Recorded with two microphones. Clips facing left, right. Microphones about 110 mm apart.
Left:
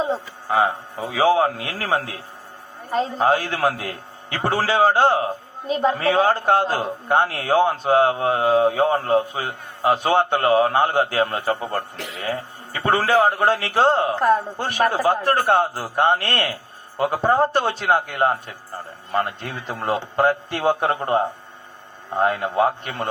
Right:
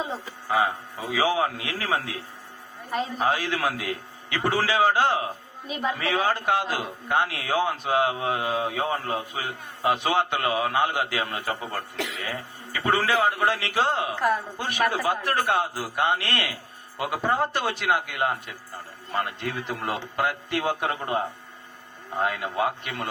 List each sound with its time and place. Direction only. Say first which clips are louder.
0.5 s a man's voice: left 4 dB; 30° left (ahead or behind)
19.4 s a man's voice: left 1 dB; 25° left (ahead or behind)